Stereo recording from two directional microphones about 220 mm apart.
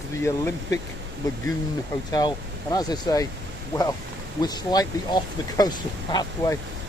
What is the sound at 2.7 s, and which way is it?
Speech, 15° left (ahead or behind).